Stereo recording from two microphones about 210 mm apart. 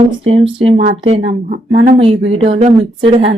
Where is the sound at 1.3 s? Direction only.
45° right (ahead or behind).